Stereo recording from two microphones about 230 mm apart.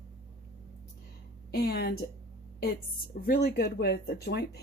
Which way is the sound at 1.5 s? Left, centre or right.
Left.